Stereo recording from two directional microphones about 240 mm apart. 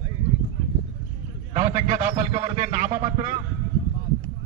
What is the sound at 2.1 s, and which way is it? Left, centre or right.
Speech, right.